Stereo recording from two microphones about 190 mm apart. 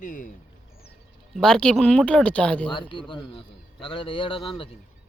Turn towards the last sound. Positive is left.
turn(degrees=25)  # may be behind; listen again after turning